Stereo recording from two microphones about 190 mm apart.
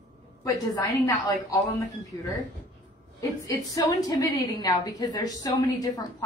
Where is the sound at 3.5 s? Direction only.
20° left (ahead or behind).